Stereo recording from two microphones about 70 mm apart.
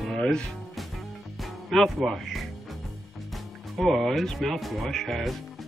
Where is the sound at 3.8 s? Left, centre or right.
Centre.